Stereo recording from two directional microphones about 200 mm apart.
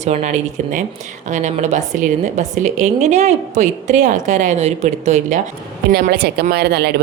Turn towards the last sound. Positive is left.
turn(degrees=-50)  # may be behind; listen again after turning